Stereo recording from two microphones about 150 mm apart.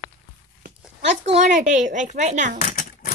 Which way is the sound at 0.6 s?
50° right (ahead or behind).